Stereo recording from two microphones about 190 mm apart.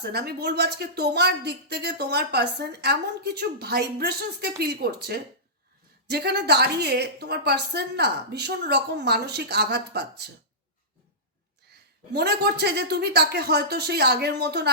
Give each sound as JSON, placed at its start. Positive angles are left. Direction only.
{"t": 0.0, "sound": "a woman's voice", "side_deg": -60}
{"t": 12.1, "sound": "a woman's voice", "side_deg": -60}